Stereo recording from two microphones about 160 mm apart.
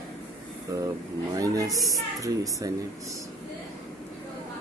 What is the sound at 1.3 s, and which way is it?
Speech, 20° right (ahead or behind).